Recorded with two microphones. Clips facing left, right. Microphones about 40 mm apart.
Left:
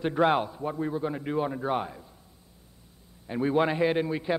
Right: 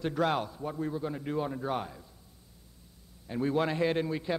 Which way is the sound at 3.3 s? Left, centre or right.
Left.